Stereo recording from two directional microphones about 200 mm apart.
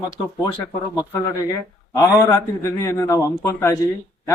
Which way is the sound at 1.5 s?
15° left (ahead or behind).